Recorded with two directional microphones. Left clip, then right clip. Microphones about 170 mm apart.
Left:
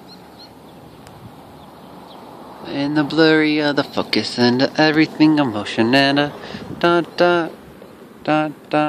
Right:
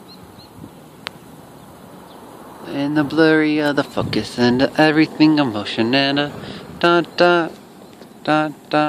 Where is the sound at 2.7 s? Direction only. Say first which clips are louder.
Even; 5° right (ahead or behind).